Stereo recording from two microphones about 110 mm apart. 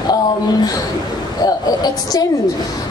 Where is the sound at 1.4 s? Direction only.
35° left (ahead or behind).